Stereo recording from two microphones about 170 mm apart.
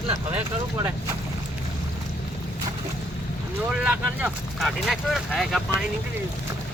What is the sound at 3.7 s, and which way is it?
Speech, 5° right (ahead or behind).